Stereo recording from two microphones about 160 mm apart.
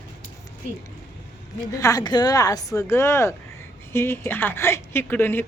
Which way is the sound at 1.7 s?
20° left (ahead or behind).